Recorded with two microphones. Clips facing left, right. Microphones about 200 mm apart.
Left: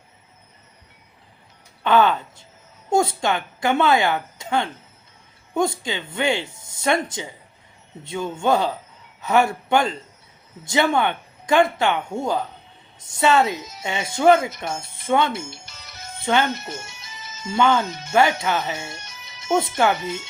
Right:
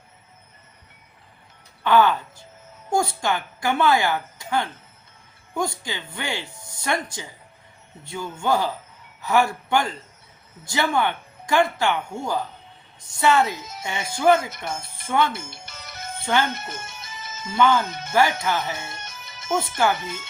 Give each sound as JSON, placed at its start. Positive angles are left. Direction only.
{"t": 1.8, "sound": "a woman's voice", "side_deg": 20}
{"t": 15.4, "sound": "music", "side_deg": -55}
{"t": 16.2, "sound": "speech", "side_deg": 20}
{"t": 16.6, "sound": "music", "side_deg": -55}
{"t": 17.6, "sound": "a woman's voice", "side_deg": 20}
{"t": 17.8, "sound": "speech", "side_deg": -55}
{"t": 18.1, "sound": "a woman's voice", "side_deg": 25}
{"t": 18.9, "sound": "music", "side_deg": -55}
{"t": 20.0, "sound": "speech", "side_deg": -50}